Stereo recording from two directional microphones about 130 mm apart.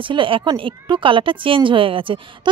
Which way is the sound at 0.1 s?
40° right (ahead or behind).